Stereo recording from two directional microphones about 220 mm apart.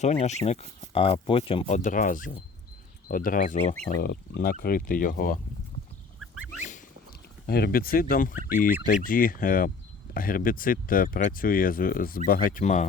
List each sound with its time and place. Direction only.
0.0 s speech: 30° left (ahead or behind)
7.4 s speech: 45° left (ahead or behind)